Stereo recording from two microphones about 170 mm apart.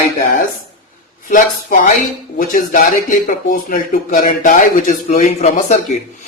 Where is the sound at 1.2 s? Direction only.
50° left (ahead or behind).